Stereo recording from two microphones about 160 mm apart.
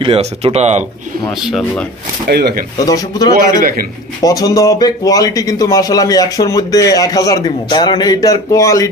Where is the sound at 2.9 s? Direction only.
25° left (ahead or behind).